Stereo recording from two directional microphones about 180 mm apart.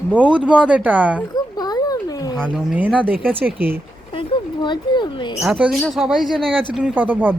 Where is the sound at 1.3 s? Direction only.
20° left (ahead or behind).